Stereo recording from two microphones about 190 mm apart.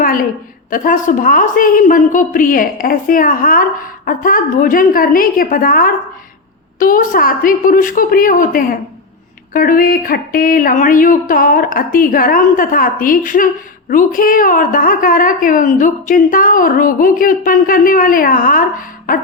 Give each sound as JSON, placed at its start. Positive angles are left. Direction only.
{"t": 0.7, "sound": "a woman's voice", "side_deg": 45}